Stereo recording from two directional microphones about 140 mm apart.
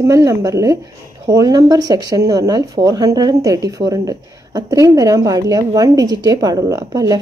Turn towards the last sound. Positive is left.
turn(degrees=-25)  # may be behind; listen again after turning